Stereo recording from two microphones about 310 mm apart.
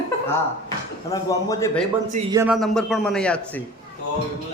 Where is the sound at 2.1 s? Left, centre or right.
Centre.